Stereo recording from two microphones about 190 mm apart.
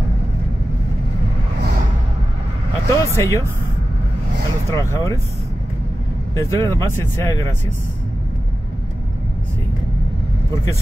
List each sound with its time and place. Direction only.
2.9 s speech: 15° left (ahead or behind)
4.7 s speech: 15° left (ahead or behind)
6.3 s speech: 15° left (ahead or behind)